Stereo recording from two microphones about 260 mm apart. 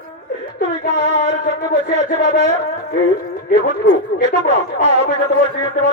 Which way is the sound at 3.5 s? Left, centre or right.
Left.